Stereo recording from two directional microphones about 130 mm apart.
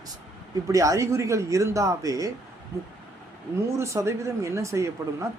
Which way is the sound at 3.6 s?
20° right (ahead or behind).